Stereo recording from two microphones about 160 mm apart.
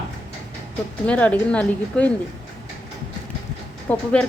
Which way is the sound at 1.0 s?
10° left (ahead or behind).